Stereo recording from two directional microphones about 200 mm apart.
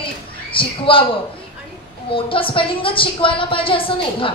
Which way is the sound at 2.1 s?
25° left (ahead or behind).